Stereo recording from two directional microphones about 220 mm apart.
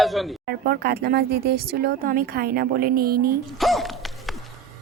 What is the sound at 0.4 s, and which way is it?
Speech, 45° right (ahead or behind).